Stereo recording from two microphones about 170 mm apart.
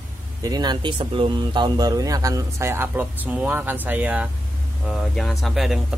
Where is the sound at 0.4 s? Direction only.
25° right (ahead or behind).